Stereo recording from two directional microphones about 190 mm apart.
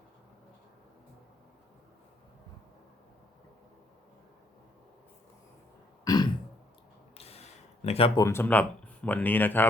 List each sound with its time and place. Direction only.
6.1 s throat clearing: 20° left (ahead or behind)
7.2 s a sound: 30° left (ahead or behind)
7.9 s speech: 30° left (ahead or behind)
8.2 s speech: 15° left (ahead or behind)